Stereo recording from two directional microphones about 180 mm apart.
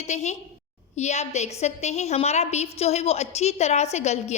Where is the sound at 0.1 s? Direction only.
40° left (ahead or behind).